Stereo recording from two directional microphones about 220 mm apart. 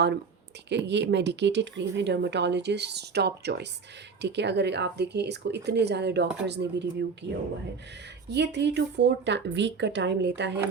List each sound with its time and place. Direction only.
0.9 s speech: 50° right (ahead or behind)